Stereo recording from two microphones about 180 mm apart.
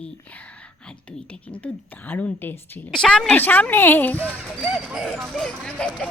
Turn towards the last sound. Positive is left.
turn(degrees=5)  # may be behind; listen again after turning